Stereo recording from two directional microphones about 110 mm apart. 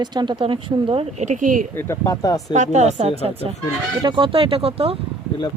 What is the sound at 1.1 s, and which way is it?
Speech, 90° right.